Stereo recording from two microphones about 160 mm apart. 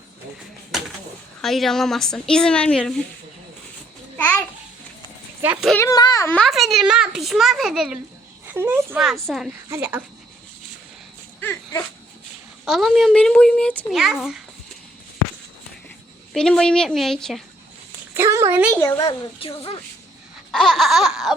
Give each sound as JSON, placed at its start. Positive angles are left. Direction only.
{"t": 1.4, "sound": "a child's voice", "side_deg": 0}
{"t": 4.2, "sound": "babbling", "side_deg": 10}
{"t": 5.4, "sound": "a child's voice", "side_deg": -10}
{"t": 5.7, "sound": "speech", "side_deg": 20}
{"t": 6.3, "sound": "a child's voice", "side_deg": 0}
{"t": 8.4, "sound": "speech", "side_deg": -15}
{"t": 9.0, "sound": "a child's voice", "side_deg": 0}
{"t": 9.6, "sound": "speech", "side_deg": -15}
{"t": 11.4, "sound": "dog", "side_deg": 10}
{"t": 12.6, "sound": "a child's voice", "side_deg": 0}
{"t": 16.3, "sound": "a child's voice", "side_deg": 5}
{"t": 18.1, "sound": "a woman's voice", "side_deg": -15}
{"t": 18.9, "sound": "speech", "side_deg": 25}
{"t": 20.5, "sound": "a sound", "side_deg": 0}